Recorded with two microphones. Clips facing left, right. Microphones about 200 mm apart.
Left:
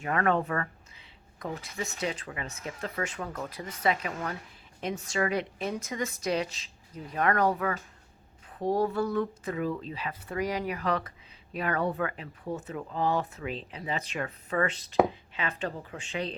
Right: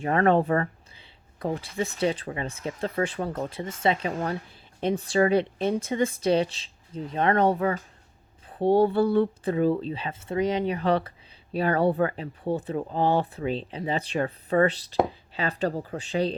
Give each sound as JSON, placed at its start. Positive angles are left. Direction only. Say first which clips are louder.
{"t": 0.0, "sound": "speech", "louder": "right 6 dB", "side_deg": -30}